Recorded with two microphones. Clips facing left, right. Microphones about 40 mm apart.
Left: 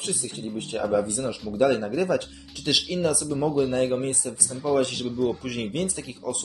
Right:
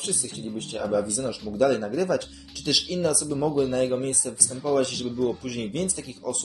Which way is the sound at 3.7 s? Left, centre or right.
Centre.